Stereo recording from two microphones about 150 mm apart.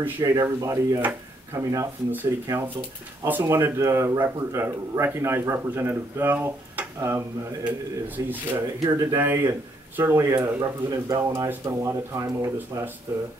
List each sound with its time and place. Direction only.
0.2 s speech: 20° right (ahead or behind)